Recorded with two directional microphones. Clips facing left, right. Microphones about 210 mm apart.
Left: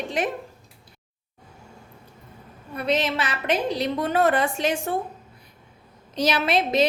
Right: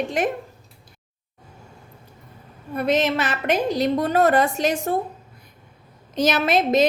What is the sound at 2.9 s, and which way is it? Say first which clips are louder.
A woman's voice: right 3 dB; 45° right (ahead or behind).